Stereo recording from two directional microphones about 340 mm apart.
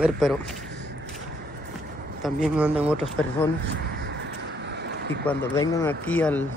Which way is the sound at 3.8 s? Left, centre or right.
Right.